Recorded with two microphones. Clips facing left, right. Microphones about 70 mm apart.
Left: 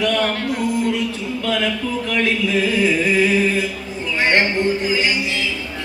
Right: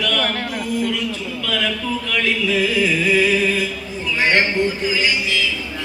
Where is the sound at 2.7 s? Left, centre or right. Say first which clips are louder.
Left 1 dB; left.